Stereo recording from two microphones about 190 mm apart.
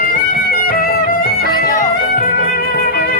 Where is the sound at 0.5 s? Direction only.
50° left (ahead or behind).